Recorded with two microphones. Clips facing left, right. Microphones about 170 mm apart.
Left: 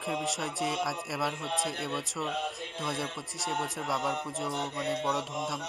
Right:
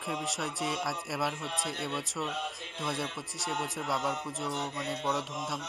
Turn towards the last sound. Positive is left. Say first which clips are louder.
# left 2 dB
turn(degrees=0)  # may be behind; listen again after turning